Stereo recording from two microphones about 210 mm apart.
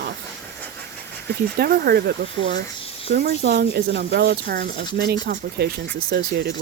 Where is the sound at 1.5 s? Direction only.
45° right (ahead or behind).